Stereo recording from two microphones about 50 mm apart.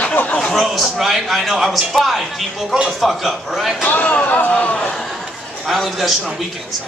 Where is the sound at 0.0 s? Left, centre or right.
Left.